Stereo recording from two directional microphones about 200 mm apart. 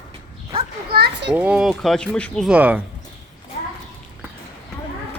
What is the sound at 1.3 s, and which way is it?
Speech, 5° right (ahead or behind).